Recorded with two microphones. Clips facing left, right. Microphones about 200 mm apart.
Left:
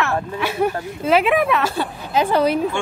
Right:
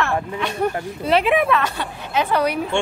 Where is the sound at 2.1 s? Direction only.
30° left (ahead or behind).